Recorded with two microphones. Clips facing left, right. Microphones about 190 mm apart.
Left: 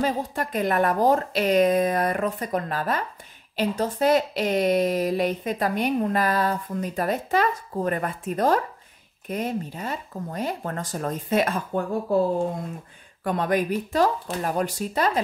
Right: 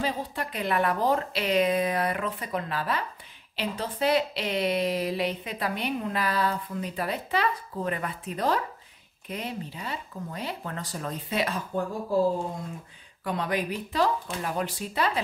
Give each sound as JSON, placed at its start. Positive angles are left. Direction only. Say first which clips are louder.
{"t": 0.0, "sound": "speech", "louder": "left 5 dB", "side_deg": 45}
{"t": 13.2, "sound": "speech", "louder": "left 5 dB", "side_deg": 50}